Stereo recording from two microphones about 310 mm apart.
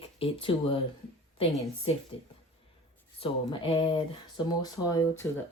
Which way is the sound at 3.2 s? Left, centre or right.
Centre.